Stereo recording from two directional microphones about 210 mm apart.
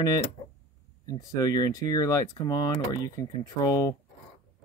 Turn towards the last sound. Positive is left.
turn(degrees=15)  # may be behind; listen again after turning